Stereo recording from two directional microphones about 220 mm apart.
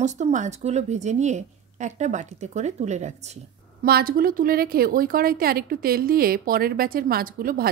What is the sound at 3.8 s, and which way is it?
A woman's voice, 45° right (ahead or behind).